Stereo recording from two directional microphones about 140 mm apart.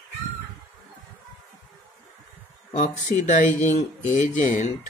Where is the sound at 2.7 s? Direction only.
60° left (ahead or behind).